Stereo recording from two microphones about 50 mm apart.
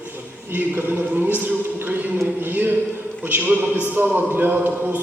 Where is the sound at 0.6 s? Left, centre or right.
Right.